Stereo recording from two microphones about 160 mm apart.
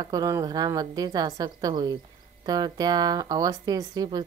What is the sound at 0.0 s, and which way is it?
Speech, 25° right (ahead or behind).